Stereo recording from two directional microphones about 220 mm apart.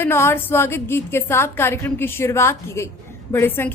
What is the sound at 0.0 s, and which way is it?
Speech, 10° left (ahead or behind).